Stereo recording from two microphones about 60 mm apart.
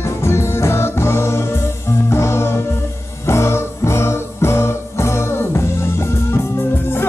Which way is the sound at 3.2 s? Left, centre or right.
Left.